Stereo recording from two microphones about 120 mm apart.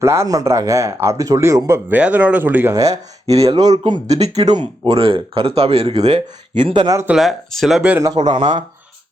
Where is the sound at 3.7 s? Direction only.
35° right (ahead or behind).